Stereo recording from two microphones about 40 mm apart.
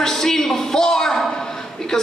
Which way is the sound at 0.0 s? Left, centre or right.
Centre.